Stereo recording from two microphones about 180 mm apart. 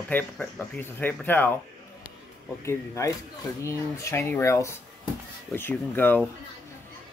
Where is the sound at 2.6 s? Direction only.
15° left (ahead or behind).